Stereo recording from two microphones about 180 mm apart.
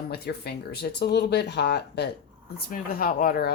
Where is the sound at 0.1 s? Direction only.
60° left (ahead or behind).